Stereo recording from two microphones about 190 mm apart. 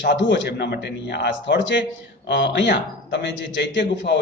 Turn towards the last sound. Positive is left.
turn(degrees=70)  # may be behind; listen again after turning